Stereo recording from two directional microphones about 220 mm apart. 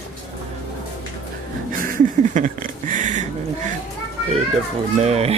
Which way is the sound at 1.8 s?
35° right (ahead or behind).